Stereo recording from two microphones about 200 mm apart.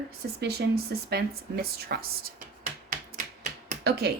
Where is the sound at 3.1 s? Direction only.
35° right (ahead or behind).